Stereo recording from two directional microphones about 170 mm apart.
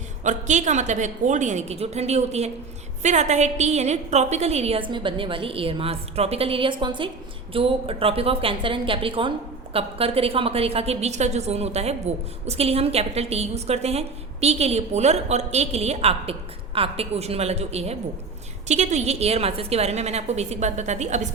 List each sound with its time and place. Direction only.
0.3 s a woman's voice: 45° right (ahead or behind)